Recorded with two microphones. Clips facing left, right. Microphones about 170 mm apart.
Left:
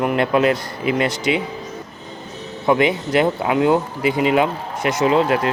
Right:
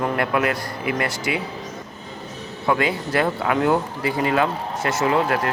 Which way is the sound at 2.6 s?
20° left (ahead or behind).